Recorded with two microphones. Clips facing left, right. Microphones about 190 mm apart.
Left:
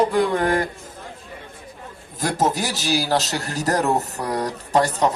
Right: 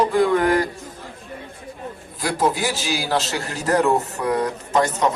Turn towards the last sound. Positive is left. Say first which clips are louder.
# even
turn(degrees=35)  # may be behind; listen again after turning